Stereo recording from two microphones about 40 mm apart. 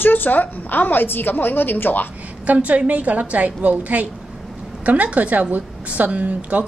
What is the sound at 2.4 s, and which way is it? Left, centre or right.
A woman's voice, right.